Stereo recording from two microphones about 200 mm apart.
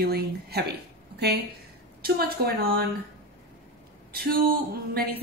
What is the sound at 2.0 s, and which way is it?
Speech, 50° right (ahead or behind).